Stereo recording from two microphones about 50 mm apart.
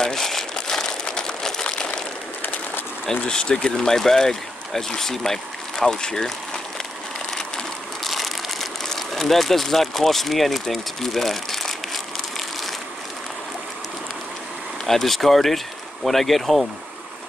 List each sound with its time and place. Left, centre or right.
0.0 s crumpling: centre
3.3 s speech: centre
7.3 s a sound: centre
14.9 s speech: centre